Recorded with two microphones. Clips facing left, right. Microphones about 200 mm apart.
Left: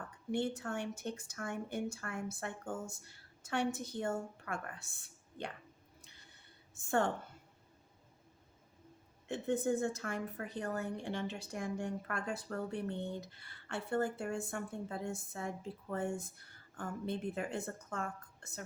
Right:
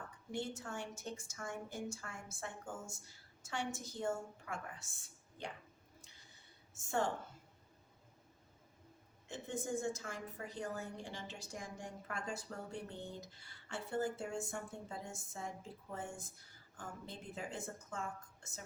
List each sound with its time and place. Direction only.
0.3 s a woman's voice: 60° left (ahead or behind)
6.1 s a sound: 60° left (ahead or behind)
9.3 s a woman's voice: 60° left (ahead or behind)